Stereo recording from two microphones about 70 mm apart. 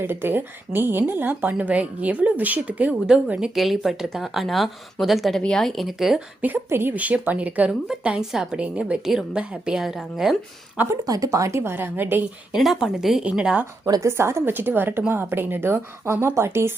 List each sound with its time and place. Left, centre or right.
0.0 s a woman's voice: right; by 6.2 s centre
6.7 s a woman's voice: right
6.9 s a woman's voice: right
7.7 s speech: centre
11.0 s a woman's voice: right
12.5 s speech: centre
14.0 s a woman's voice: right